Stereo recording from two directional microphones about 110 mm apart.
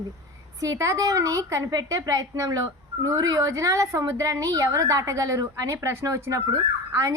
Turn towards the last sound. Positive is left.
turn(degrees=-30)  # may be behind; listen again after turning